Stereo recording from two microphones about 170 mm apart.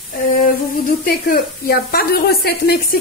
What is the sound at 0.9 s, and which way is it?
Speech, 60° left (ahead or behind).